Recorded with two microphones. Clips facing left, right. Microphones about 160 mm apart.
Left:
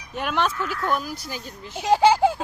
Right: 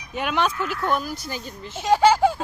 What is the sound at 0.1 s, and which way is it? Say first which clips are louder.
Speech: right 1 dB; centre (ahead or behind).